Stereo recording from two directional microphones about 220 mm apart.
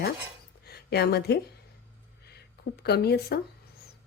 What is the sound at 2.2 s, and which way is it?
Speech, 45° left (ahead or behind).